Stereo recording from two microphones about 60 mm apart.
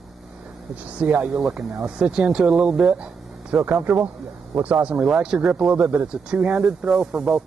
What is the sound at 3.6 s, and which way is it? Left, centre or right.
Speech, centre.